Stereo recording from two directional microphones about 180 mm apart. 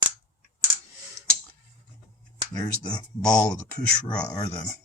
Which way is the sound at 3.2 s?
5° left (ahead or behind).